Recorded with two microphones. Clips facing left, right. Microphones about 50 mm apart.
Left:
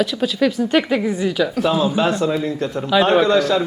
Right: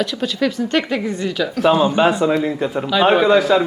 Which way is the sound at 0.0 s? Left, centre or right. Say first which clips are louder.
Left 2 dB; centre.